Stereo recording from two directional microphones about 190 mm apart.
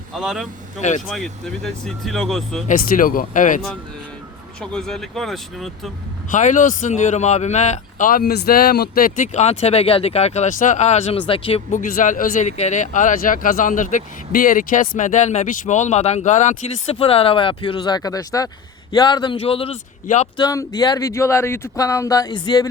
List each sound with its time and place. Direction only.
0.1 s speech: centre (ahead or behind)
0.8 s speech: 40° left (ahead or behind)
1.1 s speech: centre (ahead or behind)
2.6 s speech: 45° left (ahead or behind)
4.6 s speech: 5° left (ahead or behind)
6.3 s speech: 40° left (ahead or behind)
11.7 s speech: 45° left (ahead or behind)
20.3 s speech: 20° left (ahead or behind)